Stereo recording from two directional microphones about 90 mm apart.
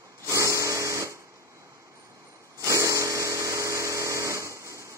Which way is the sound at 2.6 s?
35° right (ahead or behind).